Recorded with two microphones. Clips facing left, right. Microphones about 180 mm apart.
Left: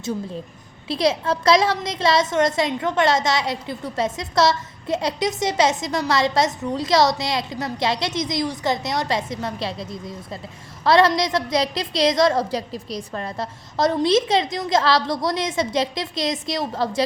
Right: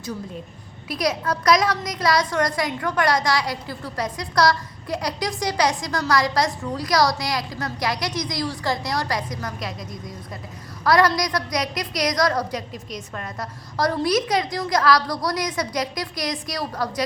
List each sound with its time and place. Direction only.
0.9 s a woman's voice: 25° left (ahead or behind)